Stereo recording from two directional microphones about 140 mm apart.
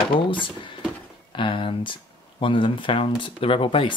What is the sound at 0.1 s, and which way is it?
Speech, 35° left (ahead or behind).